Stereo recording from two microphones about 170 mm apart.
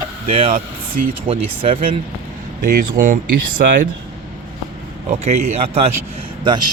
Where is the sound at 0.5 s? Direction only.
55° right (ahead or behind).